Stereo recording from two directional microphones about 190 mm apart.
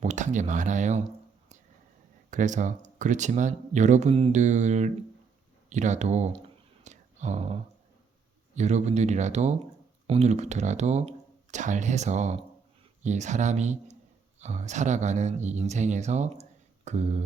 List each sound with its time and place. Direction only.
0.0 s speech: 40° right (ahead or behind)
2.3 s speech: 40° right (ahead or behind)
6.8 s a sound: 40° right (ahead or behind)
8.5 s speech: 35° right (ahead or behind)